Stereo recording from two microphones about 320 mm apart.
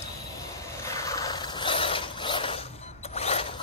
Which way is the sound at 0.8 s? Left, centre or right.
Centre.